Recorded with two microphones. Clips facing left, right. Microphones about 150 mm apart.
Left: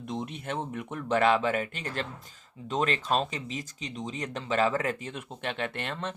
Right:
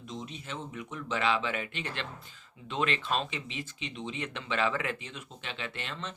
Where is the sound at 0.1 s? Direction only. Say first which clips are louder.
Left 6 dB; 55° left (ahead or behind).